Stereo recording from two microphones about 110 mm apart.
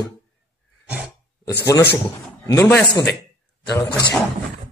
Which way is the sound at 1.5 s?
25° left (ahead or behind).